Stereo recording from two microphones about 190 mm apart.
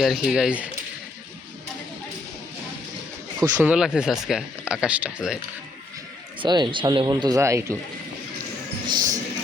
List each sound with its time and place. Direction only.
0.0 s speech: centre (ahead or behind)
3.6 s speech: 5° right (ahead or behind)
6.4 s speech: 25° right (ahead or behind)
8.9 s a sound: 20° right (ahead or behind)